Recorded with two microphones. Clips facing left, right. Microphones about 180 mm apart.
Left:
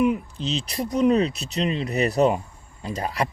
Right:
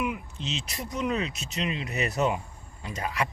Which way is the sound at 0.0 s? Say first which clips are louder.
Left 9 dB; 35° left (ahead or behind).